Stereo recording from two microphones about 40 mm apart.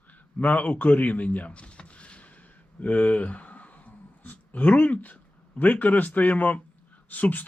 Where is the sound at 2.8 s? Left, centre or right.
Left.